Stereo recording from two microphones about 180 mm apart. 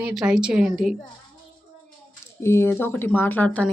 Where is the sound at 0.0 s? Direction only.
Centre (ahead or behind).